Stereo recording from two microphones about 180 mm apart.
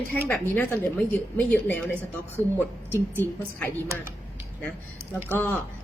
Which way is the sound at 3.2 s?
10° left (ahead or behind).